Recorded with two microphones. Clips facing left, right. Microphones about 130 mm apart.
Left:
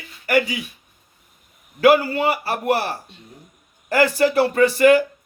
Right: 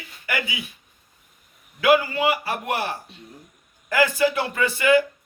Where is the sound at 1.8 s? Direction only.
35° left (ahead or behind).